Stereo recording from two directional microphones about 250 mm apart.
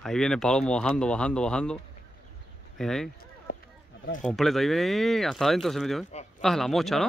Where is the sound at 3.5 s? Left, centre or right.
Left.